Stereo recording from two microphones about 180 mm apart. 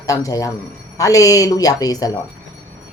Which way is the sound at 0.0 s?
20° left (ahead or behind).